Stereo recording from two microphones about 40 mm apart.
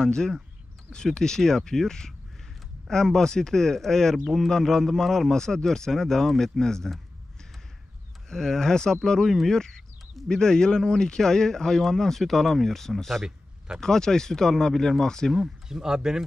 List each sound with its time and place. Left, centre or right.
0.0 s speech: centre
8.3 s speech: centre
13.7 s speech: centre
15.3 s speech: centre